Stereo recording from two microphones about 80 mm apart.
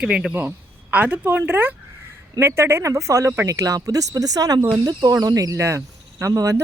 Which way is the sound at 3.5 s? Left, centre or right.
Right.